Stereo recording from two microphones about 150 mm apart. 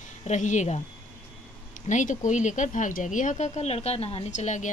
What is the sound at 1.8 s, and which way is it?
Speech, 55° left (ahead or behind).